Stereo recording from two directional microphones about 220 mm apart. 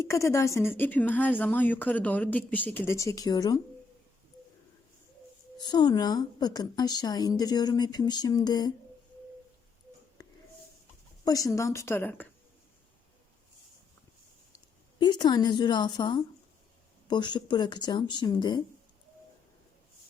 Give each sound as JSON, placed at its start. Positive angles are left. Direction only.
{"t": 0.1, "sound": "speech", "side_deg": 10}
{"t": 5.5, "sound": "speech", "side_deg": 20}
{"t": 10.2, "sound": "a sound", "side_deg": 15}
{"t": 11.3, "sound": "speech", "side_deg": 15}
{"t": 14.9, "sound": "speech", "side_deg": 20}